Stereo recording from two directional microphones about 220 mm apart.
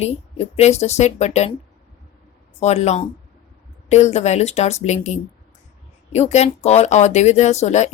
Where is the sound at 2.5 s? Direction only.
30° left (ahead or behind).